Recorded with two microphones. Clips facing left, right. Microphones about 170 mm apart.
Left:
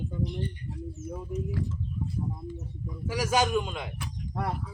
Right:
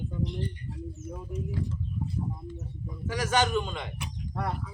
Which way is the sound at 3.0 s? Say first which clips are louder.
Left 1 dB; 10° left (ahead or behind).